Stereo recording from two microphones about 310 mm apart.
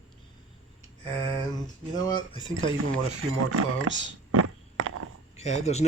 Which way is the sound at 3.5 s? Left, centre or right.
Right.